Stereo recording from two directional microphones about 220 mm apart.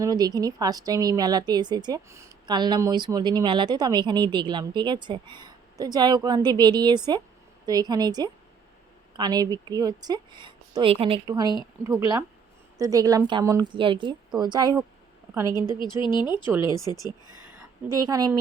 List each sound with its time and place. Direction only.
0.0 s a woman's voice: 15° right (ahead or behind)
15.8 s speech: 20° left (ahead or behind)
17.9 s speech: 15° right (ahead or behind)